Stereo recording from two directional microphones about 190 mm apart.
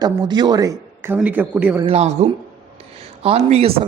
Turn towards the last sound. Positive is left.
turn(degrees=-35)  # may be behind; listen again after turning